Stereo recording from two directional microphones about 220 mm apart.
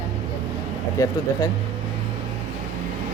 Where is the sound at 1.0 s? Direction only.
15° left (ahead or behind).